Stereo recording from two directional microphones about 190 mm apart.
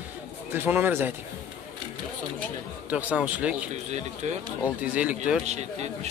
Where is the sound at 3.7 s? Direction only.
35° right (ahead or behind).